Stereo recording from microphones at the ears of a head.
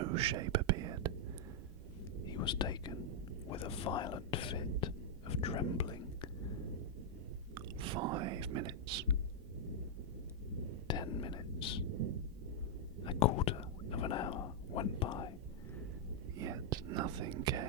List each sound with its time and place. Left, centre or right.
0.0 s whispering: right
2.3 s whispering: left
7.5 s whispering: right
10.8 s whispering: left
11.9 s thunder: right
13.1 s whispering: left
16.4 s whispering: right